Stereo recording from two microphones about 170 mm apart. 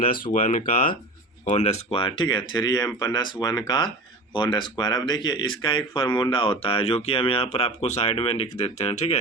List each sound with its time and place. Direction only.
0.0 s speech: 55° left (ahead or behind)
1.5 s speech: 40° left (ahead or behind)